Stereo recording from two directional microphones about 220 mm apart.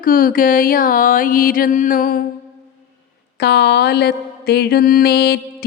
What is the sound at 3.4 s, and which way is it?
Mantra, 50° left (ahead or behind).